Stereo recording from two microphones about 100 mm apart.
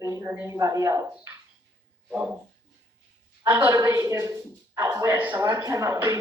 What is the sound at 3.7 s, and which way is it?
Speech, 30° right (ahead or behind).